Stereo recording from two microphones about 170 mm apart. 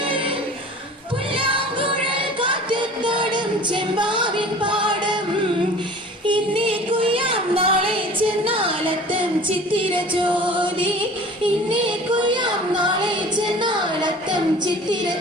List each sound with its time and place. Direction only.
1.4 s music: 30° right (ahead or behind)
6.2 s music: 30° right (ahead or behind)
11.4 s child singing: 30° right (ahead or behind)